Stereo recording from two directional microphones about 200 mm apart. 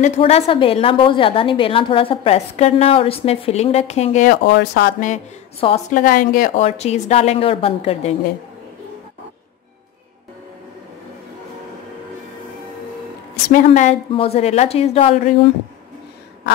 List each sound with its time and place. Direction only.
0.0 s a woman's voice: 35° left (ahead or behind)
4.5 s speech: 55° left (ahead or behind)
5.1 s a woman's voice: 30° left (ahead or behind)
5.9 s a woman's voice: 45° left (ahead or behind)
13.7 s a woman's voice: 35° left (ahead or behind)